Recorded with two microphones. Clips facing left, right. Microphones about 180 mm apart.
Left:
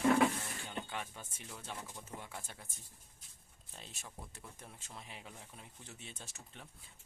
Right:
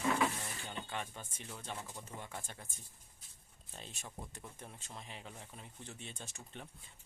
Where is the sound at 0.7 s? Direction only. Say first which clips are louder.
Even; 5° left (ahead or behind).